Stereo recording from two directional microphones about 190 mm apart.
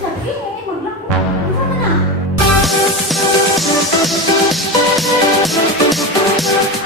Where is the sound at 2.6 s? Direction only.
Centre (ahead or behind).